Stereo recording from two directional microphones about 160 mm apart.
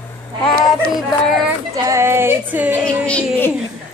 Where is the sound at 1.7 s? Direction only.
15° right (ahead or behind).